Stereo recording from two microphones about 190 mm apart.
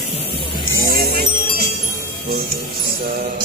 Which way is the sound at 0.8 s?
50° right (ahead or behind).